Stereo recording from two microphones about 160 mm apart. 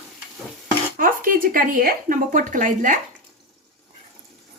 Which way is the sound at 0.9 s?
60° right (ahead or behind).